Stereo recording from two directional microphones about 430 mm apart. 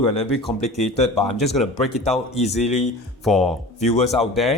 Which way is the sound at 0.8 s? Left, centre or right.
Centre.